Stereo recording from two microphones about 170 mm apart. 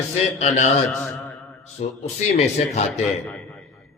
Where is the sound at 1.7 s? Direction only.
40° left (ahead or behind).